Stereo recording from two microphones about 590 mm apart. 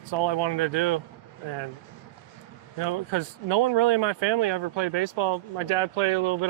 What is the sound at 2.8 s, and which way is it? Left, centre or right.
Speech, right.